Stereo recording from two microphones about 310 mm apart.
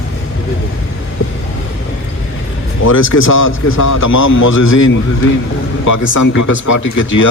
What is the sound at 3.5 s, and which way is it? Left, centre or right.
Speech, left.